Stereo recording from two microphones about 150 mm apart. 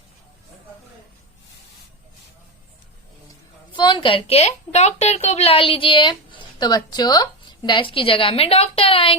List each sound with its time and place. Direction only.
3.8 s a woman's voice: 30° left (ahead or behind)